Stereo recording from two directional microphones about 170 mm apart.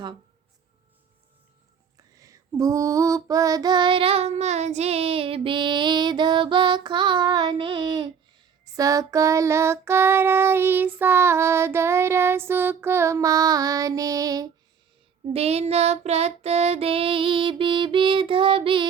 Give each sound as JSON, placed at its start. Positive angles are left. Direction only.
{"t": 2.0, "sound": "female singing", "side_deg": -20}
{"t": 15.3, "sound": "child singing", "side_deg": -35}